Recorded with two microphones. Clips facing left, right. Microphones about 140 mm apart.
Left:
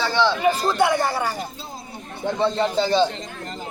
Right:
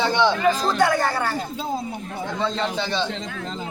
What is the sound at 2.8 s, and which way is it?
Speech, 40° left (ahead or behind).